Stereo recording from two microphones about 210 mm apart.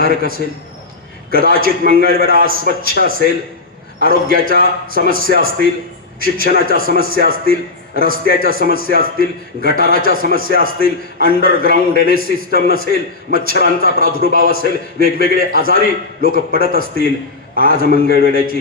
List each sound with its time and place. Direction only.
0.0 s a man's voice: 45° right (ahead or behind)